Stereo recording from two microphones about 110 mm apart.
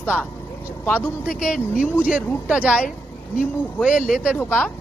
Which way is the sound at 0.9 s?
20° left (ahead or behind).